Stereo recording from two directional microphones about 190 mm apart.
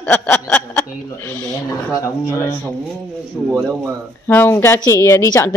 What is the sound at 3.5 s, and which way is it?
A woman's voice, centre (ahead or behind).